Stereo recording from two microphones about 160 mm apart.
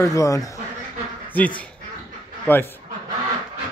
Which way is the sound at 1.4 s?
10° left (ahead or behind).